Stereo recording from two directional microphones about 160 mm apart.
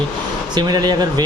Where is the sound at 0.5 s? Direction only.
25° right (ahead or behind).